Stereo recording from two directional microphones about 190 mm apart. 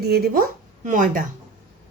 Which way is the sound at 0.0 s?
55° right (ahead or behind).